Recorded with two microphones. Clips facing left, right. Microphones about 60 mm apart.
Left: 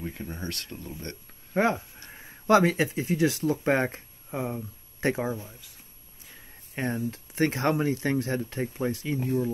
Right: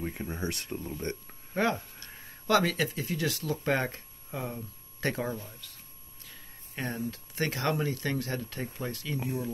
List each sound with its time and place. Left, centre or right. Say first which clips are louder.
0.0 s speech: right 1 dB; centre
1.5 s speech: left 4 dB; left
6.2 s speech: left 1 dB; left